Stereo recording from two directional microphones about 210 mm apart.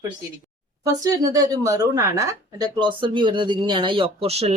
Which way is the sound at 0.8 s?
15° right (ahead or behind).